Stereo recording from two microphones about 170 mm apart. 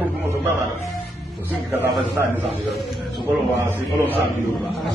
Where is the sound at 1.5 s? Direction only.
10° right (ahead or behind).